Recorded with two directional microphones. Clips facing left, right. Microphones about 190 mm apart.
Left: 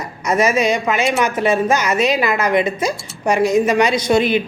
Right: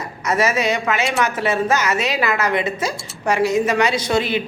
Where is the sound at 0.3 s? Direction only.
15° left (ahead or behind).